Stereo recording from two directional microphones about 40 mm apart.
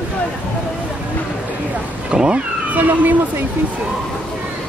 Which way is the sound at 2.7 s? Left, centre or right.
Right.